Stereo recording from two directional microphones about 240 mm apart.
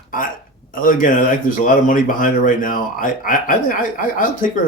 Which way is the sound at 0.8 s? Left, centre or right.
Left.